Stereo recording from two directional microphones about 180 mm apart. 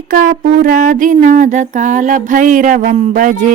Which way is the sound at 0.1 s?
45° right (ahead or behind).